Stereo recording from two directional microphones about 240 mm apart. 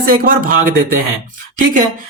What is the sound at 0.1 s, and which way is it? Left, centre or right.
Speech, right.